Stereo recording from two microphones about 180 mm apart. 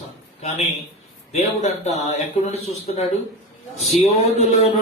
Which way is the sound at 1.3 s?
35° left (ahead or behind).